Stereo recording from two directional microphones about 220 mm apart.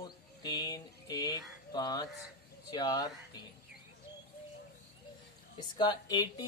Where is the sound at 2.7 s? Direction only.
20° left (ahead or behind).